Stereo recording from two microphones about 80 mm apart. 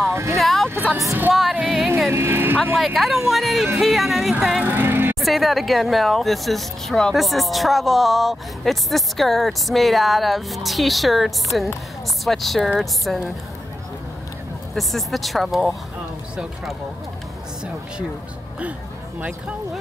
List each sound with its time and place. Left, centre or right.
0.1 s speech: right
0.4 s a sound: centre
1.3 s music: centre
2.0 s speech: right
2.8 s speech: centre
4.6 s vehicle: right
5.2 s speech: centre
14.8 s speech: centre
18.6 s music: centre